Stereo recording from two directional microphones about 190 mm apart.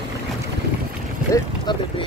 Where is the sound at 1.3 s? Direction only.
25° left (ahead or behind).